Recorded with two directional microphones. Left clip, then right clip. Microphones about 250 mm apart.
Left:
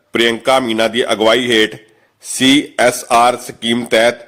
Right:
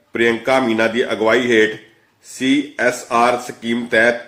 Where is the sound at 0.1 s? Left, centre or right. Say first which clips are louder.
Left 3 dB; left.